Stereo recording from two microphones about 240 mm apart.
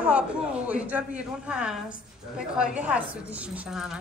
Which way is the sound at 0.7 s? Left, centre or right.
Centre.